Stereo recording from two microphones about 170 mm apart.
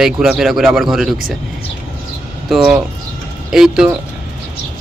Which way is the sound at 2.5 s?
5° right (ahead or behind).